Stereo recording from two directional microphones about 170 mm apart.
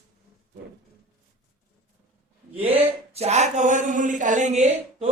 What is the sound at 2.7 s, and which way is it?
Speech, 35° right (ahead or behind).